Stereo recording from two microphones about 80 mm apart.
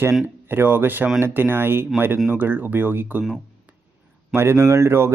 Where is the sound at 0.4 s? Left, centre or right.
Right.